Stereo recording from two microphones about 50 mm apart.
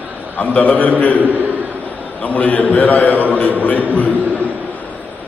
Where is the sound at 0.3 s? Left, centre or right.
Left.